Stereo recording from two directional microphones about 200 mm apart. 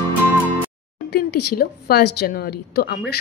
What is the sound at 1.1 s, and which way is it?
A woman's voice, 55° left (ahead or behind).